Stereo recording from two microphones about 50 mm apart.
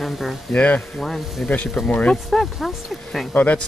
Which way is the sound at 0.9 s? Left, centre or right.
Centre.